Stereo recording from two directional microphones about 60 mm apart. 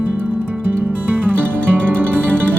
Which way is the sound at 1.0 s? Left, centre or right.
Right.